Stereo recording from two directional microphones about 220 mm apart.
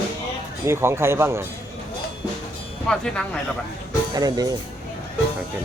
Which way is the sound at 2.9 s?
5° left (ahead or behind).